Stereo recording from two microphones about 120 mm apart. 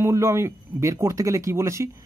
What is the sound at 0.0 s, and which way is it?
Speech, 25° right (ahead or behind).